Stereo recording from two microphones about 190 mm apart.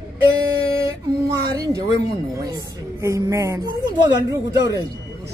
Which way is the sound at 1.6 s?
20° right (ahead or behind).